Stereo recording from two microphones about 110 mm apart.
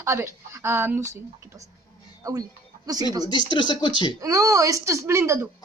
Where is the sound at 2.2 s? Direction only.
35° right (ahead or behind).